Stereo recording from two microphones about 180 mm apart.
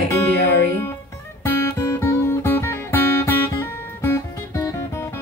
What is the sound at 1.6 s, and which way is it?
Music, 15° left (ahead or behind).